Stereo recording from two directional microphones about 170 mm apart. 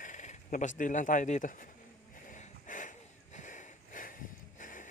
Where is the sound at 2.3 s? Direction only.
50° left (ahead or behind).